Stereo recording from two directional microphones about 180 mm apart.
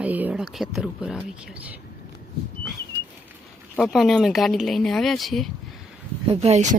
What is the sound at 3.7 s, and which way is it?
Speech, centre (ahead or behind).